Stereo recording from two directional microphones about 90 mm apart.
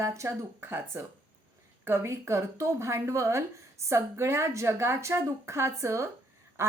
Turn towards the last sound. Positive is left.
turn(degrees=-30)  # may be behind; listen again after turning